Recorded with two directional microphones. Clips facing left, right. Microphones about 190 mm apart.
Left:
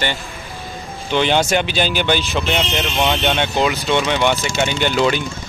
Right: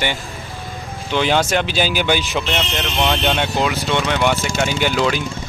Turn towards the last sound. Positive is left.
turn(degrees=0)  # may be behind; listen again after turning